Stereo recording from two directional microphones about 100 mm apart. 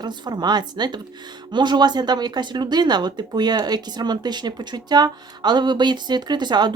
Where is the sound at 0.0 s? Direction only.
45° right (ahead or behind).